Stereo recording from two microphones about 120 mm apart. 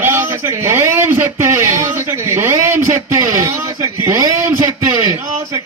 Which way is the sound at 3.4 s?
30° right (ahead or behind).